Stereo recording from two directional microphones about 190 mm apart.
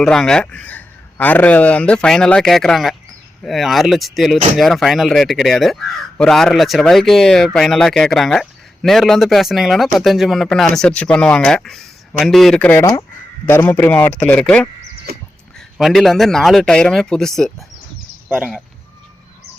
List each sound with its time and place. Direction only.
0.0 s speech: 5° left (ahead or behind)
15.1 s a sound: 55° right (ahead or behind)
15.5 s speech: centre (ahead or behind)